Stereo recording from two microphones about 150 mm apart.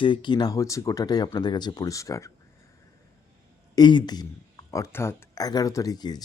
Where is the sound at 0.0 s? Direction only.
30° left (ahead or behind).